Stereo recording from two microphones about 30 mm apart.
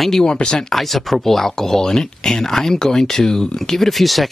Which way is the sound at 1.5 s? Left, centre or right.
Centre.